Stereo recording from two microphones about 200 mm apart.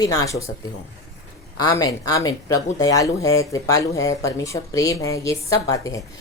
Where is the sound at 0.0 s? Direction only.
15° left (ahead or behind).